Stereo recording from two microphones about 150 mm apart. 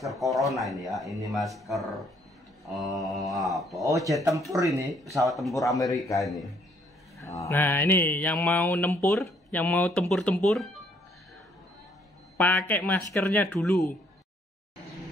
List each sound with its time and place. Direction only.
0.0 s speech: centre (ahead or behind)
3.8 s speech: 20° right (ahead or behind)
4.8 s speech: centre (ahead or behind)
5.5 s speech: 20° left (ahead or behind)
6.2 s speech: centre (ahead or behind)
7.2 s speech: 20° left (ahead or behind); by 10.7 s 5° left (ahead or behind)
12.4 s speech: 10° left (ahead or behind)
13.6 s speech: centre (ahead or behind)